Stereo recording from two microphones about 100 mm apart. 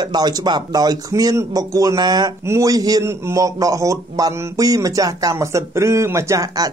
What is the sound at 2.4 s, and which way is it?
A man's voice, 30° right (ahead or behind).